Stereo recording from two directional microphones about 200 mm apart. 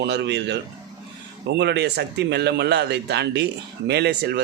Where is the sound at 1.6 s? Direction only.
55° right (ahead or behind).